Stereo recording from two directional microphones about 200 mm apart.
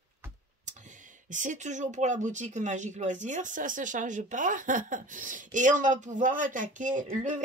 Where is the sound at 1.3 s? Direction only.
40° right (ahead or behind).